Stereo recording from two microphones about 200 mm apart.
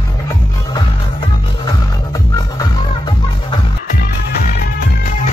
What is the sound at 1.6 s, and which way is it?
Music, 20° left (ahead or behind).